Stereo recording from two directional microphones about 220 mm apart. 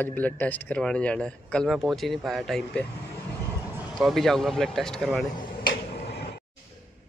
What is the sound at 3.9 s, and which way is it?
A man's voice, centre (ahead or behind).